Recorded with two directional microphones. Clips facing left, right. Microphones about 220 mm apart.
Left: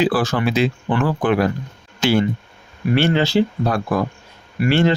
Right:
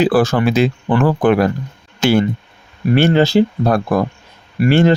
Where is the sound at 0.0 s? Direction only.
45° right (ahead or behind).